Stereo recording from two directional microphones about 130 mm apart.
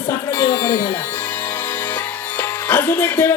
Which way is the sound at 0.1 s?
20° left (ahead or behind).